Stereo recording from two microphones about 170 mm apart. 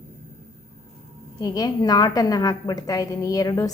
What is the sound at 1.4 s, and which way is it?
A woman's voice, 20° left (ahead or behind).